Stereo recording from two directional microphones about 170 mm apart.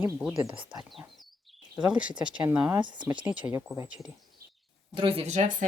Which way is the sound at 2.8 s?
25° right (ahead or behind).